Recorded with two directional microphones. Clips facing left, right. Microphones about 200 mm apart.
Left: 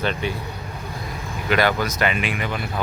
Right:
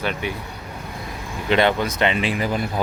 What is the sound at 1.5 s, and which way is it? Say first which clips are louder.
Speech: right 2 dB; 25° right (ahead or behind).